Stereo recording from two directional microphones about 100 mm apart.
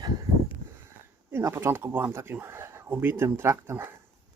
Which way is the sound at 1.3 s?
25° right (ahead or behind).